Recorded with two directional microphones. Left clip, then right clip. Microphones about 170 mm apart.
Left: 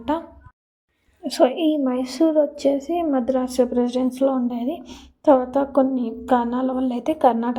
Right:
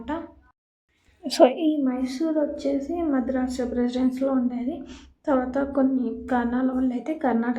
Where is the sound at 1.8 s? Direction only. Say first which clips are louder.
Left 6 dB; 45° left (ahead or behind).